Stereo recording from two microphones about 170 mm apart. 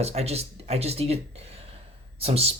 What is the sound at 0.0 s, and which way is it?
Speech, 40° right (ahead or behind).